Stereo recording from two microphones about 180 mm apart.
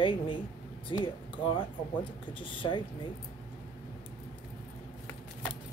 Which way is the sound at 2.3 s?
30° left (ahead or behind).